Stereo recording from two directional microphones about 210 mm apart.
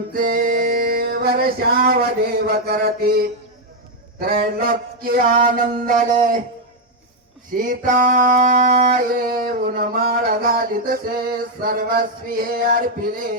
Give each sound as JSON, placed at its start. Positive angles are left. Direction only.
{"t": 0.1, "sound": "music", "side_deg": -45}
{"t": 7.5, "sound": "music", "side_deg": -40}